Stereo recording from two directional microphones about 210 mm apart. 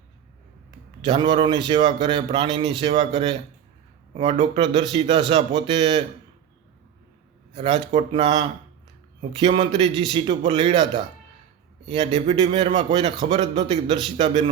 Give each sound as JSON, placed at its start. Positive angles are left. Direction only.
{"t": 1.0, "sound": "a man's voice", "side_deg": -20}
{"t": 7.5, "sound": "a man's voice", "side_deg": -25}